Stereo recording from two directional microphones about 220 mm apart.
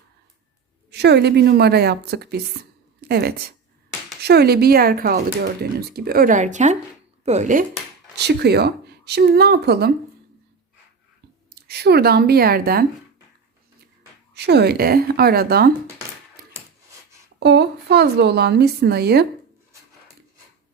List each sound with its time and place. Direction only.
0.9 s a woman's voice: 50° right (ahead or behind); by 7.6 s 35° right (ahead or behind)
8.1 s speech: 50° right (ahead or behind)
11.5 s speech: 45° right (ahead or behind)
14.3 s speech: 50° right (ahead or behind)
17.4 s speech: 50° right (ahead or behind)